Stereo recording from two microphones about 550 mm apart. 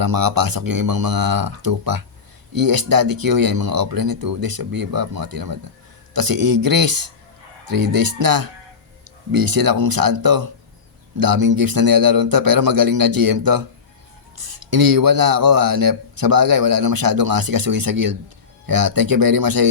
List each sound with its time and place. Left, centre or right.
0.0 s speech: right